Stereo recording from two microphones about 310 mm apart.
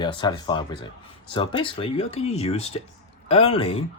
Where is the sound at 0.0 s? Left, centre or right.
Centre.